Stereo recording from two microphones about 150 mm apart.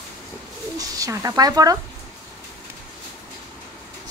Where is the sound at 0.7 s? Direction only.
25° right (ahead or behind).